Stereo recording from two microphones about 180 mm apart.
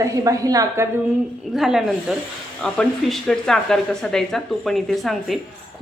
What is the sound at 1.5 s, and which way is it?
Speech, centre (ahead or behind).